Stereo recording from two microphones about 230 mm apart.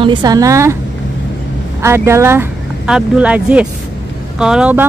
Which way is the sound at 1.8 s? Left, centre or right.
Centre.